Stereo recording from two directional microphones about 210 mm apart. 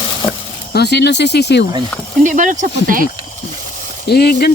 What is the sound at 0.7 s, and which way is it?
Speech, 50° left (ahead or behind).